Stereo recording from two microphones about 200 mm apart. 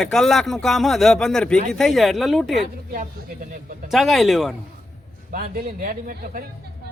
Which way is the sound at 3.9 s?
Centre (ahead or behind).